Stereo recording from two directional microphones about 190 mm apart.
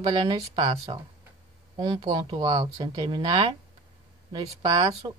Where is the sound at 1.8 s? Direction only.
25° right (ahead or behind).